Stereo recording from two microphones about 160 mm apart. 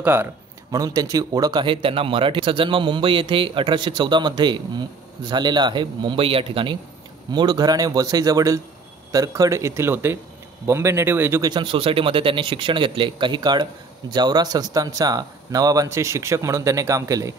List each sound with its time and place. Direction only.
0.0 s speech: 15° right (ahead or behind)
11.4 s speech: 30° right (ahead or behind)